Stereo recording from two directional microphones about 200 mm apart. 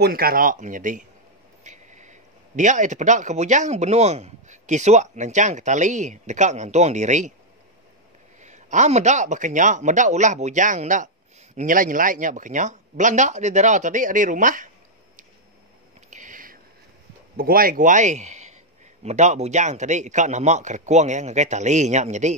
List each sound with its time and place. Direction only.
0.0 s speech: 50° right (ahead or behind)
8.4 s speech: 35° right (ahead or behind)
16.1 s a sound: 40° right (ahead or behind)
17.4 s a man's voice: 45° right (ahead or behind)